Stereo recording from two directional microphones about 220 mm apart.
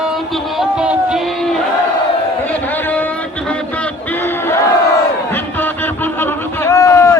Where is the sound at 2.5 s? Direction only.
10° left (ahead or behind).